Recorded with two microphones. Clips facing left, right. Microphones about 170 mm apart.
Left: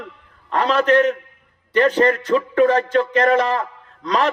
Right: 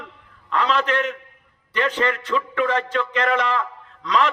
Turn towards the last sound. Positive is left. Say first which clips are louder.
# left 1 dB
turn(degrees=40)  # may be behind; listen again after turning